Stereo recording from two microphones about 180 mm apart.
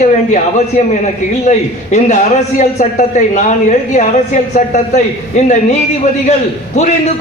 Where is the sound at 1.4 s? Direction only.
40° left (ahead or behind).